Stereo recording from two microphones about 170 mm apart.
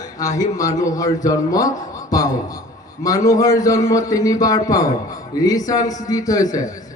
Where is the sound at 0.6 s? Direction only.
20° left (ahead or behind).